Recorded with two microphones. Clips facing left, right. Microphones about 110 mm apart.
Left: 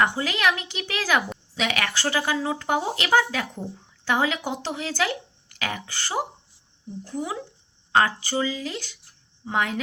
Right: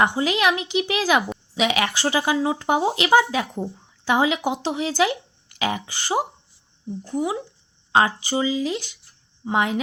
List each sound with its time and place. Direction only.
0.0 s speech: 20° right (ahead or behind)